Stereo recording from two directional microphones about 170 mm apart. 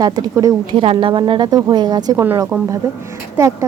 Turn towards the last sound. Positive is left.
turn(degrees=-15)  # may be behind; listen again after turning